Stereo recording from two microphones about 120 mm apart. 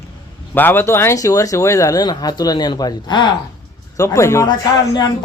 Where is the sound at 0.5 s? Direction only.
15° left (ahead or behind); by 3.3 s 35° left (ahead or behind).